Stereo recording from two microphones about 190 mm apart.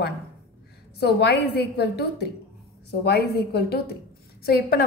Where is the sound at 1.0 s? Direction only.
60° left (ahead or behind).